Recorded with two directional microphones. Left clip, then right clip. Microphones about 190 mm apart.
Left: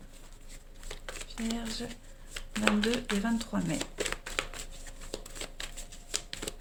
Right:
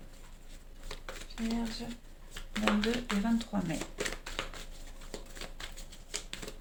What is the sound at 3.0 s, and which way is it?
Speech, 40° left (ahead or behind).